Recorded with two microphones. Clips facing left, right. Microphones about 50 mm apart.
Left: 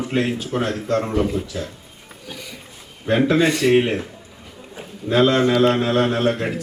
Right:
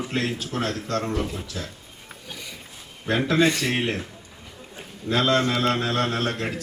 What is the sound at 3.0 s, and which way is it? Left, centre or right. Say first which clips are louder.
Speech: left 4 dB; centre.